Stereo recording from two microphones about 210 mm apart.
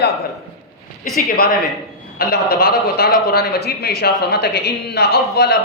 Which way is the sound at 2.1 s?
45° left (ahead or behind).